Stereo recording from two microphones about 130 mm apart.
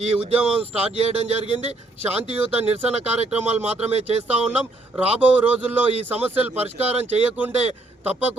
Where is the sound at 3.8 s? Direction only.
55° right (ahead or behind).